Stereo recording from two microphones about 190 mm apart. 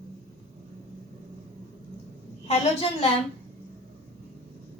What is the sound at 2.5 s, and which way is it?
Speech, 30° left (ahead or behind).